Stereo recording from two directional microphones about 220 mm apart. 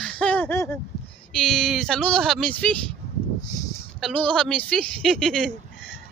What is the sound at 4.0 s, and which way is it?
Speech, 5° left (ahead or behind).